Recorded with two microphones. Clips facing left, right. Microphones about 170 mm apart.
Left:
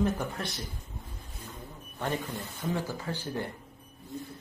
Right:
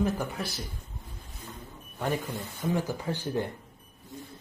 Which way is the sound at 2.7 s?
15° right (ahead or behind).